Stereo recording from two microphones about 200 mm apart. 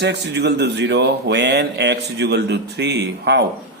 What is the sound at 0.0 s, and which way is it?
Speech, 55° right (ahead or behind).